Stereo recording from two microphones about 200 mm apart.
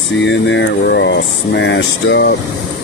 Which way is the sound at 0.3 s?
65° left (ahead or behind).